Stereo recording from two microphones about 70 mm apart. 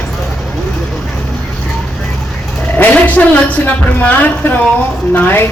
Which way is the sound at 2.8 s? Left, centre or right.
Left.